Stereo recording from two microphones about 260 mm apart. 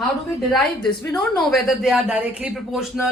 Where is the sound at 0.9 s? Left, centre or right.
Centre.